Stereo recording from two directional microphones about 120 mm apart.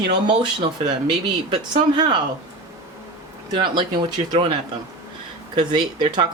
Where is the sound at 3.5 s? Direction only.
40° right (ahead or behind).